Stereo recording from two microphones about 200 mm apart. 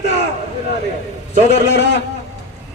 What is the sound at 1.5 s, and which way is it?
Speech, 60° left (ahead or behind).